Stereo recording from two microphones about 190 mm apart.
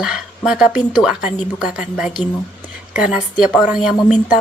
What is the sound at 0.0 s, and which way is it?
A woman's voice, centre (ahead or behind).